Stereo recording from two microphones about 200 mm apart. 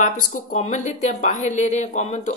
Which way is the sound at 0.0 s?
40° left (ahead or behind).